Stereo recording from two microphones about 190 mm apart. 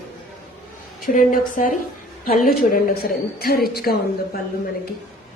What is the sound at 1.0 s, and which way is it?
A woman's voice, 45° left (ahead or behind).